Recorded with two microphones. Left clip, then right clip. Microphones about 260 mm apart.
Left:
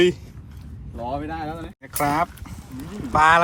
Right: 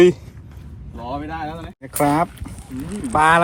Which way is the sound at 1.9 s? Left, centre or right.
Right.